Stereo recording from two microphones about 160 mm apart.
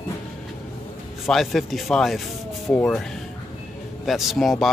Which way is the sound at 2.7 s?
10° left (ahead or behind).